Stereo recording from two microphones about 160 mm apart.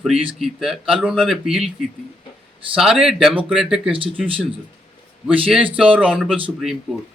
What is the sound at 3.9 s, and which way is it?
Speech, 35° right (ahead or behind).